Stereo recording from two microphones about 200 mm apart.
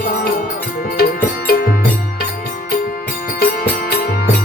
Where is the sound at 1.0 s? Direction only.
50° left (ahead or behind).